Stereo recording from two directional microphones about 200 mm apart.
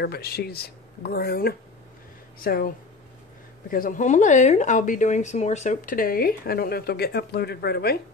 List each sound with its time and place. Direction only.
0.0 s speech: 50° left (ahead or behind)
3.7 s a woman's voice: 45° left (ahead or behind)